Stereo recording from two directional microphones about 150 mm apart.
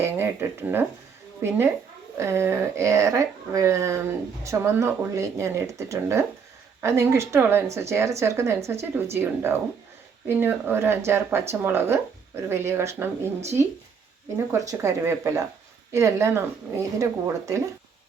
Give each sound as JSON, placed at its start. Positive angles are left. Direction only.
{"t": 0.0, "sound": "a woman's voice", "side_deg": -15}